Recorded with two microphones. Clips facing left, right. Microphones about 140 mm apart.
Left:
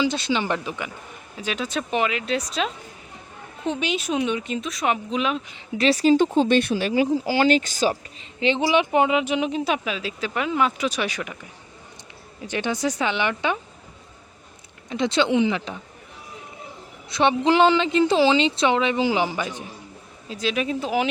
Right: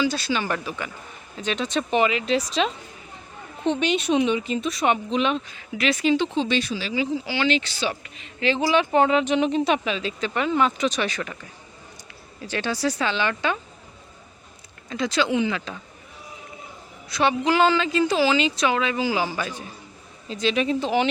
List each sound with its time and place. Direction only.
0.0 s a woman's voice: 20° left (ahead or behind)
1.4 s speech: 5° left (ahead or behind)
5.7 s speech: 35° left (ahead or behind)
8.2 s speech: 25° left (ahead or behind)
12.4 s speech: 15° left (ahead or behind)
14.8 s a woman's voice: 20° left (ahead or behind)
17.1 s a woman's voice: 25° left (ahead or behind)
20.2 s speech: 5° left (ahead or behind)